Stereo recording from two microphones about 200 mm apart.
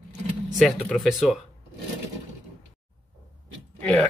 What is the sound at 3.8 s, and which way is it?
Speech, 5° left (ahead or behind).